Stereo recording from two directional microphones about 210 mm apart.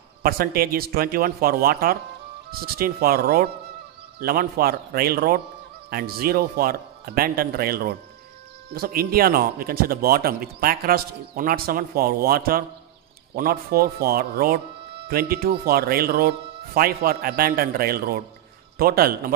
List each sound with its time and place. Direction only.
0.2 s a man's voice: 45° right (ahead or behind)